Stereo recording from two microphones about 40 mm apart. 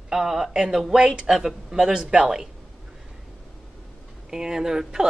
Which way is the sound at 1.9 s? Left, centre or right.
Right.